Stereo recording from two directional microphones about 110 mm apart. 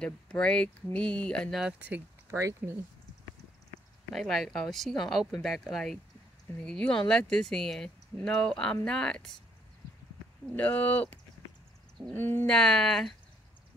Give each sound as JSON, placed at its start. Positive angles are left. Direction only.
{"t": 0.0, "sound": "speech", "side_deg": 10}
{"t": 1.6, "sound": "speech", "side_deg": -10}
{"t": 4.1, "sound": "speech", "side_deg": 0}
{"t": 10.5, "sound": "speech", "side_deg": 15}
{"t": 12.5, "sound": "speech", "side_deg": 5}